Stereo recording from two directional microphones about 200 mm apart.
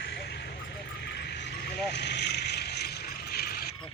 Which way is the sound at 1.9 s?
60° left (ahead or behind).